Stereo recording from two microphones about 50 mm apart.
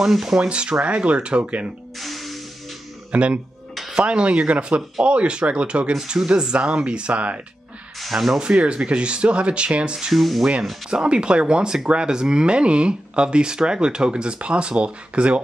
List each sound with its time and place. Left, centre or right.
0.0 s speech: centre
0.4 s speech: right
2.0 s music: centre
3.1 s speech: right
8.0 s speech: centre
8.4 s speech: right
10.1 s speech: centre
10.9 s speech: right